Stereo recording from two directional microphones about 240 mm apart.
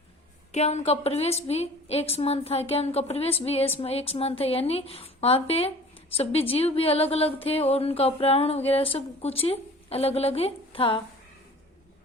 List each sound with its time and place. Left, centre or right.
0.5 s speech: left